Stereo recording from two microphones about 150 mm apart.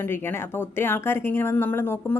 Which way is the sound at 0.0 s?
15° left (ahead or behind).